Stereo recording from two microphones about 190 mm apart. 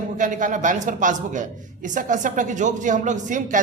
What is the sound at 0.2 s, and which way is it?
Speech, 45° right (ahead or behind).